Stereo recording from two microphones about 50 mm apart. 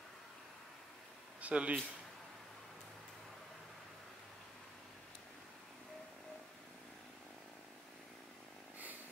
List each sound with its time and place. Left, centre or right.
1.4 s speech: right